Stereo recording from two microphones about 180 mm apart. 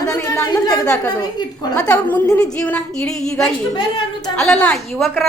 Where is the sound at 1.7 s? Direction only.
10° left (ahead or behind).